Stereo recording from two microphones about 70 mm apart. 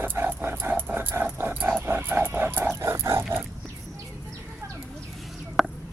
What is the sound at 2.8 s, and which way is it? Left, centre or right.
Dog, right.